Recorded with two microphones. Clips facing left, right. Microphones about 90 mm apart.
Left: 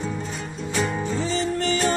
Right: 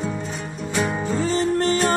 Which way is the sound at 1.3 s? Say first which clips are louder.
Right 5 dB; 45° right (ahead or behind).